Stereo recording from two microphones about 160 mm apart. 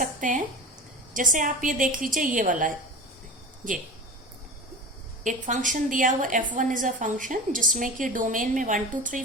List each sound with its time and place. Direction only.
0.0 s a woman's voice: 55° right (ahead or behind)
5.2 s a woman's voice: 50° right (ahead or behind)